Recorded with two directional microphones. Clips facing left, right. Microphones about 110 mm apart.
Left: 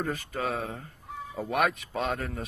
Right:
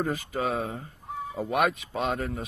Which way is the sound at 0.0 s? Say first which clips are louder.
Right 3 dB; 10° right (ahead or behind).